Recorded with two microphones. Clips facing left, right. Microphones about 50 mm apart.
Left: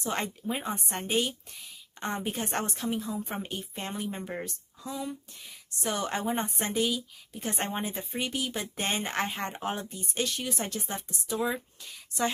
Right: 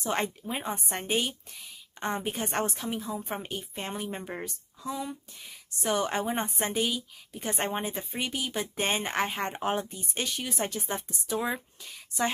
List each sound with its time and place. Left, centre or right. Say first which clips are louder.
0.0 s a woman's voice: right 2 dB; centre
11.1 s speech: left 2 dB; centre